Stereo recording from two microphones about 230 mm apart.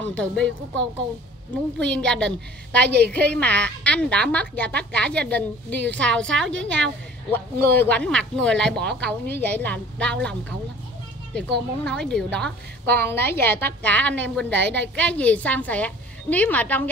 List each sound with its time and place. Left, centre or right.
0.1 s speech: centre
1.9 s speech: centre
2.8 s a woman's voice: right
3.3 s speech: centre
11.3 s a woman's voice: centre